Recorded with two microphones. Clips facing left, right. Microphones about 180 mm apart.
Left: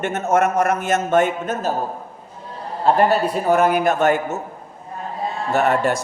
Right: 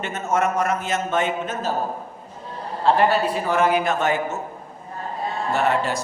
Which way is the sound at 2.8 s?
45° left (ahead or behind).